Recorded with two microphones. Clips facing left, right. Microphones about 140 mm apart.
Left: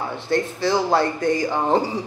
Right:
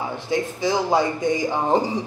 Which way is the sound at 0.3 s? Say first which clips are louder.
Left 2 dB; 15° right (ahead or behind).